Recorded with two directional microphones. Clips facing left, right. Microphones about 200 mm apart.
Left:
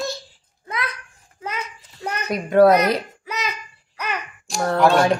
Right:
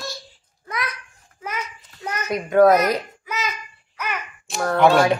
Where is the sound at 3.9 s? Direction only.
35° left (ahead or behind).